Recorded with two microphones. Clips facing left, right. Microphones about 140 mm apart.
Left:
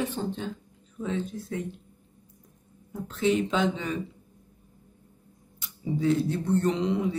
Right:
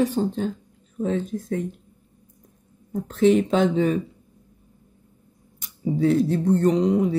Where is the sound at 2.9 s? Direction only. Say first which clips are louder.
Right 7 dB; 45° right (ahead or behind).